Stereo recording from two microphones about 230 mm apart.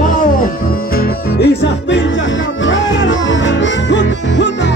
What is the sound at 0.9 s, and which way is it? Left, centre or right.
Music, left.